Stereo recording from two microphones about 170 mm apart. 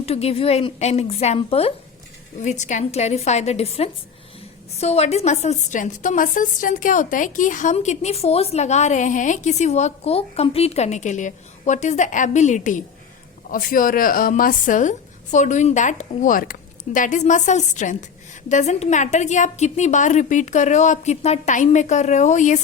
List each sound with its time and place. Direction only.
0.0 s speech: 35° left (ahead or behind)
2.4 s a woman's voice: 45° left (ahead or behind)